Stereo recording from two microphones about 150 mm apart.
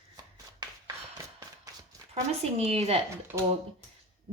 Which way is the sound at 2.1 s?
45° right (ahead or behind).